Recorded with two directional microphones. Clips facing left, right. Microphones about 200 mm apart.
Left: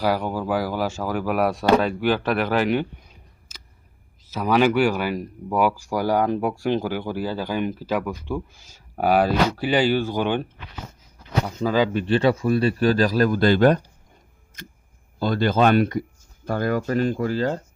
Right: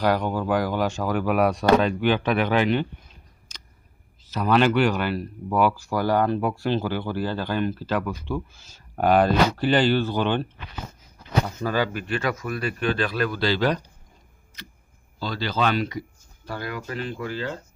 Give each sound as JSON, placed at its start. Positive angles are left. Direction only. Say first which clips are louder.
{"t": 0.0, "sound": "speech", "louder": "even", "side_deg": 10}
{"t": 3.5, "sound": "a sound", "louder": "even", "side_deg": 5}
{"t": 4.3, "sound": "speech", "louder": "left 1 dB", "side_deg": 10}
{"t": 11.4, "sound": "speech", "louder": "left 8 dB", "side_deg": 15}
{"t": 11.9, "sound": "speech", "louder": "left 7 dB", "side_deg": 30}